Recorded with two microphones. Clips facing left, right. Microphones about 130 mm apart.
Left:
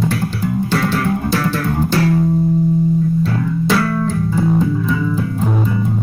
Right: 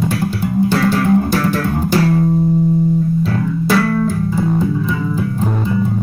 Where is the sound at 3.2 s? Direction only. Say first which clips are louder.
Even; 5° right (ahead or behind).